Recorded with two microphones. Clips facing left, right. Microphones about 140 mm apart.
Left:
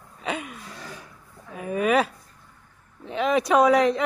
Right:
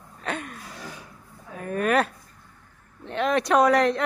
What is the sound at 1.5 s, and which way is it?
Speech, 5° left (ahead or behind).